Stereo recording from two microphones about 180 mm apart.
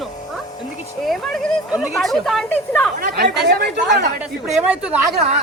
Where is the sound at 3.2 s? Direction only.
65° right (ahead or behind).